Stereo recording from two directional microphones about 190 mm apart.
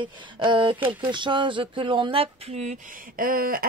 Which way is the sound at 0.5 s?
25° right (ahead or behind).